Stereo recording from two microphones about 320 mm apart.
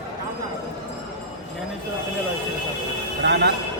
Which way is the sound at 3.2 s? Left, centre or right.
Right.